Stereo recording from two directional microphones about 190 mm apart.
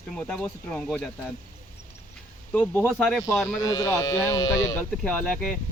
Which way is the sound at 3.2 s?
15° left (ahead or behind).